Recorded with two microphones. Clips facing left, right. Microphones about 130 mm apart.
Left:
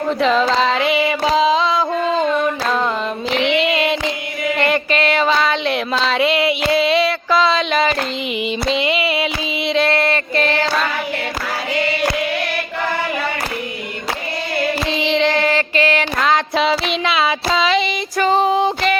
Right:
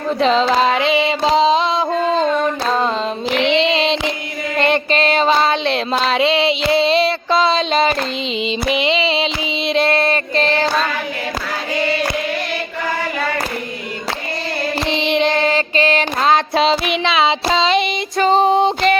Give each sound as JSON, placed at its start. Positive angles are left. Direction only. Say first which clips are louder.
{"t": 0.2, "sound": "female singing", "louder": "right 2 dB", "side_deg": -20}
{"t": 0.5, "sound": "music", "louder": "right 1 dB", "side_deg": -20}
{"t": 3.5, "sound": "child singing", "louder": "right 2 dB", "side_deg": -25}
{"t": 4.5, "sound": "music", "louder": "right 2 dB", "side_deg": -25}
{"t": 5.3, "sound": "female singing", "louder": "right 2 dB", "side_deg": -30}
{"t": 14.8, "sound": "female singing", "louder": "right 3 dB", "side_deg": -20}